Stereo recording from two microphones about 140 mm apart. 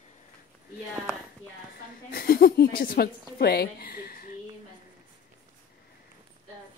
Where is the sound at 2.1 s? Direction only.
90° left.